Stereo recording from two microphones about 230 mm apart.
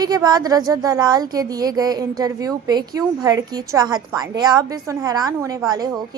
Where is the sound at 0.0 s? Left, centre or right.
Centre.